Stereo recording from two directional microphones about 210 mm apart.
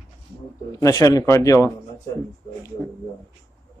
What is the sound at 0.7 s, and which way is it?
A man's voice, 15° left (ahead or behind).